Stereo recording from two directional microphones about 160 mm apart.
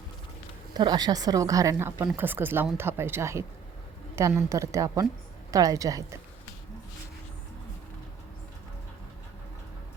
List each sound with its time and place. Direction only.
0.7 s speech: 25° right (ahead or behind)